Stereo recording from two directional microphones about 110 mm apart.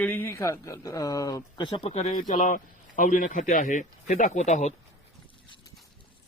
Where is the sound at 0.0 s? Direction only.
20° left (ahead or behind); by 1.9 s 50° left (ahead or behind).